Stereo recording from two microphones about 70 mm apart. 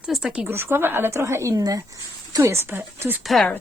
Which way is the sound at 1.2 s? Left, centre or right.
Right.